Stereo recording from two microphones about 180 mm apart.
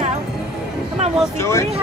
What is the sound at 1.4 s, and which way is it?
Speech, 15° left (ahead or behind).